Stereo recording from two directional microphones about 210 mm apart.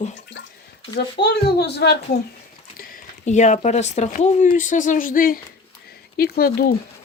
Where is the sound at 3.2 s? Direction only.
35° left (ahead or behind).